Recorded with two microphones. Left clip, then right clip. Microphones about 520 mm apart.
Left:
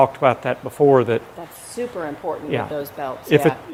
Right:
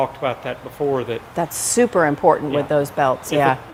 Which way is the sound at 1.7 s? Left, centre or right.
Right.